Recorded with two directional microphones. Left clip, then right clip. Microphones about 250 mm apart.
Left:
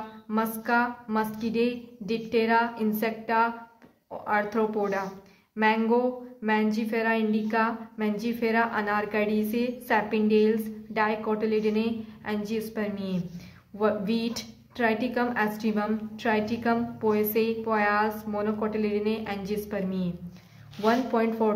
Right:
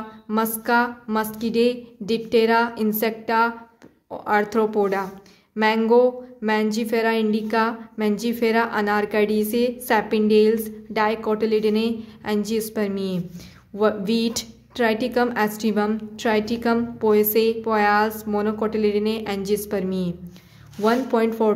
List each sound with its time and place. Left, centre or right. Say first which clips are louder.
0.3 s speech: right 5 dB; right